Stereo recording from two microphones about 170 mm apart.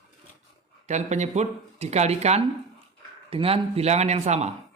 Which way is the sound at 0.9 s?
40° right (ahead or behind).